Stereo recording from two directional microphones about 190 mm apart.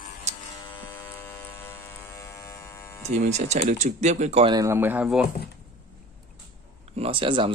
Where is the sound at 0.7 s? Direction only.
10° left (ahead or behind).